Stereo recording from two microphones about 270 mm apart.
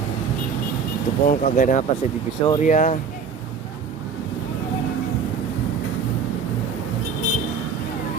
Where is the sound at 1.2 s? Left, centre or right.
Left.